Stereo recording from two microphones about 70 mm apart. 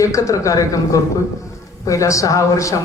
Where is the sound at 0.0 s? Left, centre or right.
Left.